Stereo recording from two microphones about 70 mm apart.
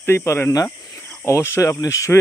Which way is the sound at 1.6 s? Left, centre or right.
Left.